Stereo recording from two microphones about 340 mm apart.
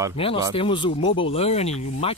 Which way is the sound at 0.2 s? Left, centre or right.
Centre.